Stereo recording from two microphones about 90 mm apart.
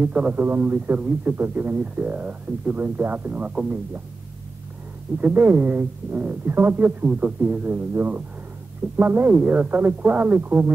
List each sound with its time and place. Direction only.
0.0 s a man's voice: 15° right (ahead or behind)
5.2 s a man's voice: 20° right (ahead or behind)